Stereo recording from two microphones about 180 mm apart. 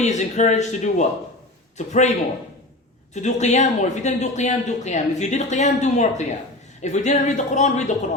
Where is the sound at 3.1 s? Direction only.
40° left (ahead or behind).